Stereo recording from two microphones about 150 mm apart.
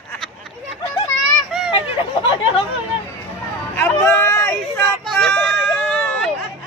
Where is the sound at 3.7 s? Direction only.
15° left (ahead or behind).